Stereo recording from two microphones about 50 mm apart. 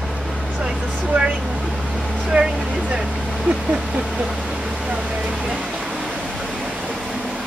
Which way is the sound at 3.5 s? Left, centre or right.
Centre.